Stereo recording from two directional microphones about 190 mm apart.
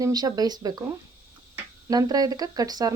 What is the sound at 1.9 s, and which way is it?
Speech, 20° right (ahead or behind).